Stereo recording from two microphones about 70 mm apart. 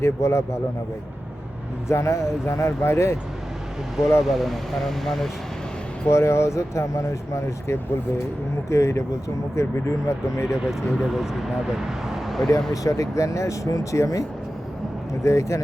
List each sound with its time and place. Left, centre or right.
0.0 s speech: left
1.9 s speech: left
4.2 s speech: centre
6.1 s speech: left
10.4 s speech: centre
12.7 s speech: left